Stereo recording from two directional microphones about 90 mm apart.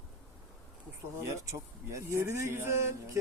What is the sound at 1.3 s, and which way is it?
Speech, 35° right (ahead or behind).